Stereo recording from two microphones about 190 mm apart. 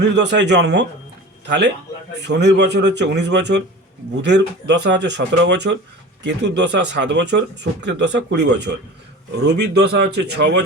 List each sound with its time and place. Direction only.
0.0 s speech: 70° right (ahead or behind)